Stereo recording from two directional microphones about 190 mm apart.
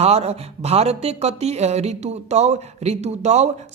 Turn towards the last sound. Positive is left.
turn(degrees=-35)  # may be behind; listen again after turning